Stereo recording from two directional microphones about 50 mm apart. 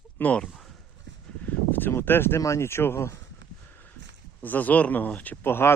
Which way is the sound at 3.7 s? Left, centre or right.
Left.